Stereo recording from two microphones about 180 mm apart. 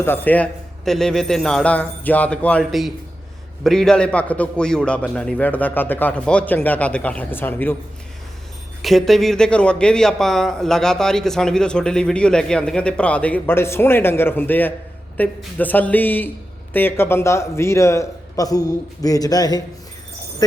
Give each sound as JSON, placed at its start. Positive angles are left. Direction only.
{"t": 0.0, "sound": "a man's voice", "side_deg": 10}
{"t": 8.8, "sound": "a man's voice", "side_deg": 0}